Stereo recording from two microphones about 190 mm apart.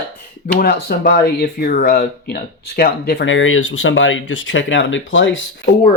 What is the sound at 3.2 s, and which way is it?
Speech, 90° left.